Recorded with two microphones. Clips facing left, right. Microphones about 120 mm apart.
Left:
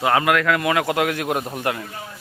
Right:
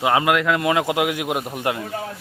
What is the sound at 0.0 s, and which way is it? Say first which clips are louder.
A man's voice: even; 20° right (ahead or behind).